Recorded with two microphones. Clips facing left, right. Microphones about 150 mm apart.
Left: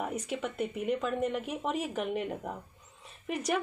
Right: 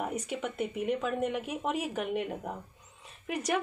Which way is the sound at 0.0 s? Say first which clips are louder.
Even; centre (ahead or behind).